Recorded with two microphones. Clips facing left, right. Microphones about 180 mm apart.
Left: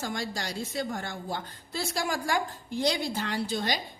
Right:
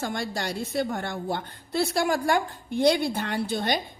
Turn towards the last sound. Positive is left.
turn(degrees=-60)  # may be behind; listen again after turning